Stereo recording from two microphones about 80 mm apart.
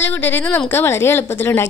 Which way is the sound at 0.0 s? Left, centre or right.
Left.